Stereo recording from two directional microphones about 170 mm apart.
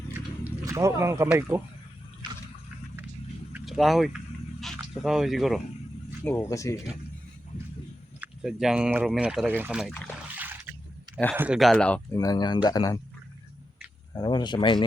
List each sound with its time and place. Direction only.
0.6 s speech: 20° right (ahead or behind)
3.5 s vehicle: centre (ahead or behind)
4.6 s a sound: centre (ahead or behind)
6.2 s speech: 15° left (ahead or behind)
8.2 s speech: 5° right (ahead or behind)
9.8 s speech: 5° left (ahead or behind)
10.3 s a sound: 10° right (ahead or behind)
11.3 s speech: 5° right (ahead or behind)
12.1 s speech: 20° left (ahead or behind)
14.1 s speech: 25° left (ahead or behind)